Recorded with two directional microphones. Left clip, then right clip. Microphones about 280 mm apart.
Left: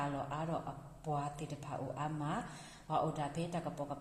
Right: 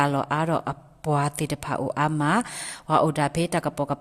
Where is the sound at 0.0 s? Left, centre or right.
Right.